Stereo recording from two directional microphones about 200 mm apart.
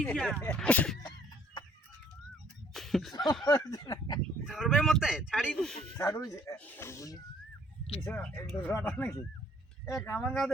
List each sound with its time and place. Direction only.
0.0 s speech: 5° left (ahead or behind)
2.7 s a sound: centre (ahead or behind)
3.4 s speech: 20° left (ahead or behind)
4.4 s speech: 5° right (ahead or behind)
6.0 s speech: 15° left (ahead or behind)
8.0 s speech: 5° left (ahead or behind)